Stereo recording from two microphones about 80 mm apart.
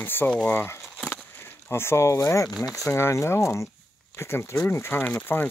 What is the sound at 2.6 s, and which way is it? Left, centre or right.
Speech, left.